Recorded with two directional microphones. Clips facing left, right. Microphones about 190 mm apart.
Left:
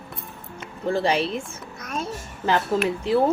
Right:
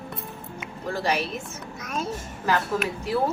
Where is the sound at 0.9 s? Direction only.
25° left (ahead or behind).